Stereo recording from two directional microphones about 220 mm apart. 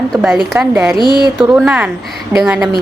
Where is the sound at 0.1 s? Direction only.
Centre (ahead or behind).